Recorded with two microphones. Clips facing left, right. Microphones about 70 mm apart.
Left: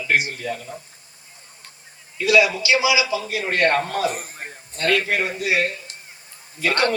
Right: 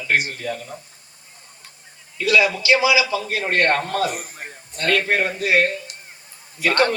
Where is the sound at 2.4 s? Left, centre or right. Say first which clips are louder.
Right 1 dB; right.